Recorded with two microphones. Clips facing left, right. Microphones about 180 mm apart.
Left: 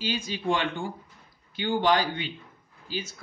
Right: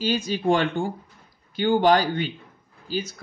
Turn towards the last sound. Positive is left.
turn(degrees=-40)  # may be behind; listen again after turning